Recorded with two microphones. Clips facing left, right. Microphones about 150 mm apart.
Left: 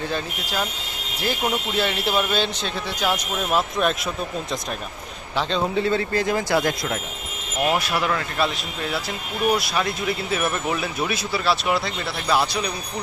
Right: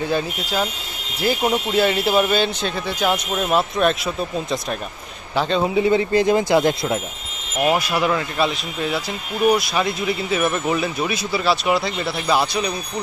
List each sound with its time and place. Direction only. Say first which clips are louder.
1.8 s speech: right 6 dB; 5° right (ahead or behind)
5.8 s speech: right 7 dB; 15° right (ahead or behind)
7.6 s speech: right 3 dB; 5° right (ahead or behind)